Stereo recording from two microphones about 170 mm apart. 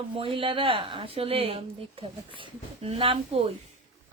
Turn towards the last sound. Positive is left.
turn(degrees=-35)  # may be behind; listen again after turning